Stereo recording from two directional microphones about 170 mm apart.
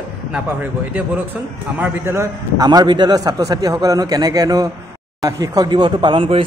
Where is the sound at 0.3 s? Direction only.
10° right (ahead or behind).